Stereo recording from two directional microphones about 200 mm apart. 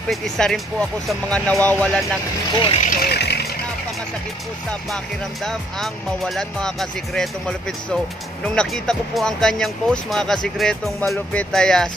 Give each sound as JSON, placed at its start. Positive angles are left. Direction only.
{"t": 0.1, "sound": "speech", "side_deg": 0}
{"t": 2.8, "sound": "vehicle", "side_deg": 45}
{"t": 4.6, "sound": "speech", "side_deg": 5}